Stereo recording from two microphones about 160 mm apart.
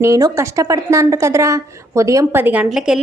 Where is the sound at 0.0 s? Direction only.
20° right (ahead or behind).